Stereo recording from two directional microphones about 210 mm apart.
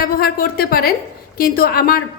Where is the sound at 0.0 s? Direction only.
45° left (ahead or behind).